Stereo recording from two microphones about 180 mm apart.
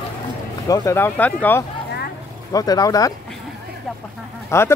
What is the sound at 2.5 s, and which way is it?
Speech, 20° left (ahead or behind).